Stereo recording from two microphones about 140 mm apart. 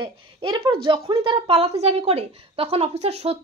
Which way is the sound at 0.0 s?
35° right (ahead or behind).